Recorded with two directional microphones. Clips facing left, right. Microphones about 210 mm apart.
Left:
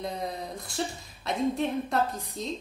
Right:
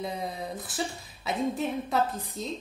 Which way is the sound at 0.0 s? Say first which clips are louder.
Even; 5° right (ahead or behind).